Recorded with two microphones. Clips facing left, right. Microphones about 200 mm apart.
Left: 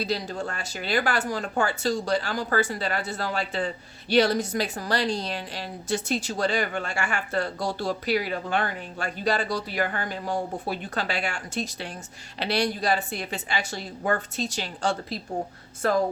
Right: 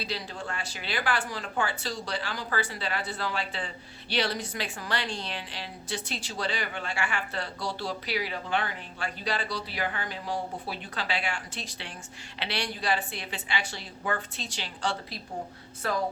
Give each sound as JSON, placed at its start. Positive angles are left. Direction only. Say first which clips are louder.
{"t": 0.0, "sound": "a woman's voice", "louder": "left 7 dB", "side_deg": 45}